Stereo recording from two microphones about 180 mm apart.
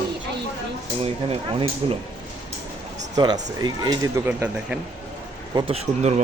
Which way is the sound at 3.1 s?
20° right (ahead or behind).